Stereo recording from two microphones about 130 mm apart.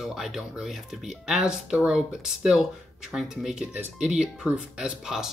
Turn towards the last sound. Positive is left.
turn(degrees=-5)  # may be behind; listen again after turning